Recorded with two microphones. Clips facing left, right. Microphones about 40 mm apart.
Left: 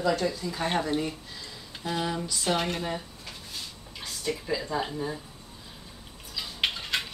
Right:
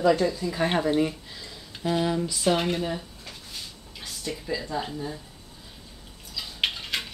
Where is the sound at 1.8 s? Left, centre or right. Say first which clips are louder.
Right 5 dB; centre.